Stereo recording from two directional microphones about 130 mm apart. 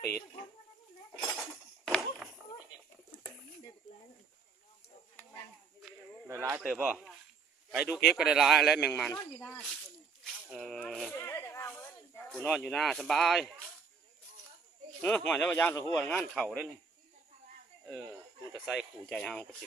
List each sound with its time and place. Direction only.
1.1 s chink: 5° left (ahead or behind)
6.2 s speech: 15° right (ahead or behind)
6.8 s a man's voice: 5° right (ahead or behind); by 9.6 s 15° left (ahead or behind)
9.6 s a man's voice: centre (ahead or behind)
10.2 s a sound: centre (ahead or behind)
10.8 s a man's voice: centre (ahead or behind)
11.1 s snake: 20° left (ahead or behind)
12.4 s a man's voice: 10° left (ahead or behind)
15.0 s speech: 10° left (ahead or behind)
16.0 s a man's voice: 10° left (ahead or behind)
18.6 s a man's voice: centre (ahead or behind)